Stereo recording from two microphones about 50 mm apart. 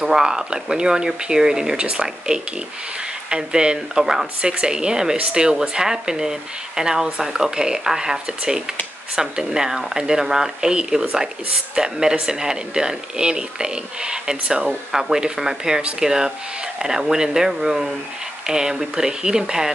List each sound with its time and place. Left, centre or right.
0.0 s speech: centre
4.0 s speech: centre
4.4 s speech: centre